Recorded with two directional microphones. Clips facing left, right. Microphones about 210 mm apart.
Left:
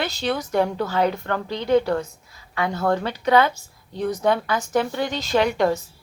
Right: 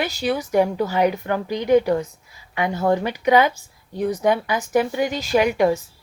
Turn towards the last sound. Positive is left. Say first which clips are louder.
# right 2 dB
turn(degrees=-10)  # may be behind; listen again after turning